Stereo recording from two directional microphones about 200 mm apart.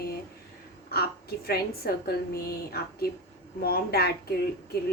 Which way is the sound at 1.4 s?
50° left (ahead or behind).